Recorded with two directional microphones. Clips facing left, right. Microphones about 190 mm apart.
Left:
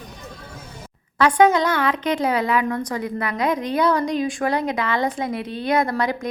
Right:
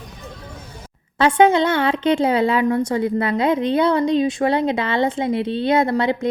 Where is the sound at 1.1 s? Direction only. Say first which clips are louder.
Right 2 dB; 25° right (ahead or behind).